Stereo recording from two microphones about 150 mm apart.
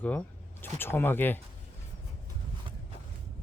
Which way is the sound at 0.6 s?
15° left (ahead or behind).